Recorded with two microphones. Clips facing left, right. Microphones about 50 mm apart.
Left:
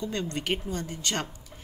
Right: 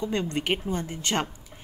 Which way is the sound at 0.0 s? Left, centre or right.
Right.